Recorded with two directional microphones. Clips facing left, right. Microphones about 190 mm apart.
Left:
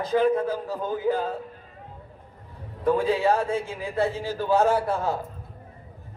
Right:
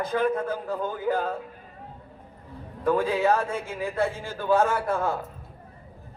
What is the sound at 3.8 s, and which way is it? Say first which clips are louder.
A man's voice: left 1 dB; 50° right (ahead or behind).